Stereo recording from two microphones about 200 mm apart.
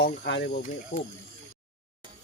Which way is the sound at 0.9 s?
35° left (ahead or behind).